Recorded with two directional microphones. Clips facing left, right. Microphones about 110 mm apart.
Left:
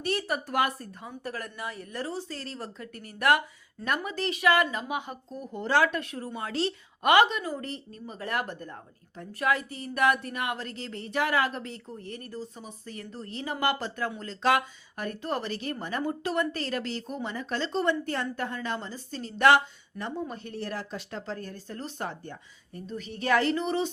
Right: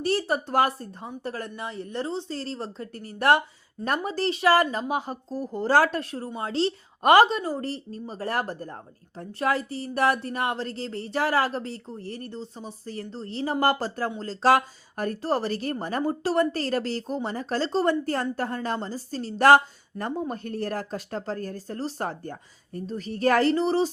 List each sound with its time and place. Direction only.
0.0 s a woman's voice: 30° right (ahead or behind)